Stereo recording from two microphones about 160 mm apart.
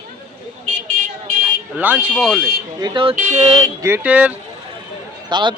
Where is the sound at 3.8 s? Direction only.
10° right (ahead or behind).